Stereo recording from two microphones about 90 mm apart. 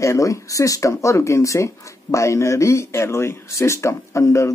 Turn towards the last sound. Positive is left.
turn(degrees=35)  # may be behind; listen again after turning